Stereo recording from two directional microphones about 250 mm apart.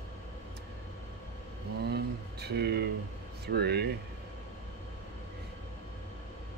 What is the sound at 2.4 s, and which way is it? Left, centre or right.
Speech, right.